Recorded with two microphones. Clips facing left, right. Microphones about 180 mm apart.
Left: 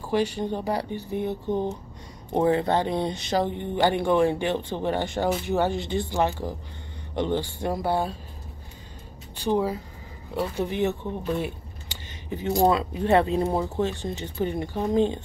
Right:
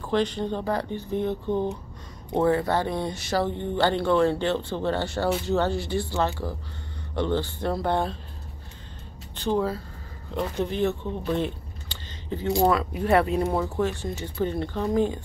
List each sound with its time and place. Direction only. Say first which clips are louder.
0.0 s speech: even; 10° left (ahead or behind)
9.4 s speech: left 1 dB; 15° left (ahead or behind)